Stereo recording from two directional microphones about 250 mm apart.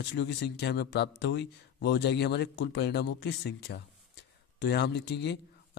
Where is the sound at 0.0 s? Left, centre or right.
Left.